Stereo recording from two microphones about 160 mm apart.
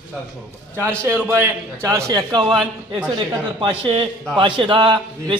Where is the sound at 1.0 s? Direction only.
15° right (ahead or behind).